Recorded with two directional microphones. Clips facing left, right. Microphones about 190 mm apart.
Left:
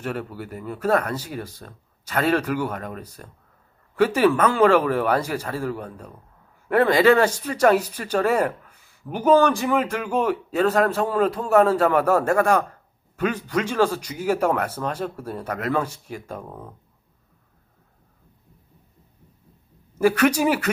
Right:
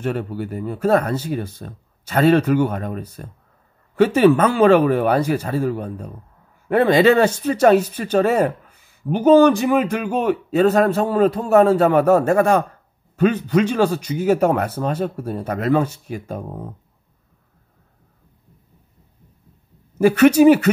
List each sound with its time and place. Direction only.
0.0 s a man's voice: 25° right (ahead or behind)
20.0 s a man's voice: 25° right (ahead or behind)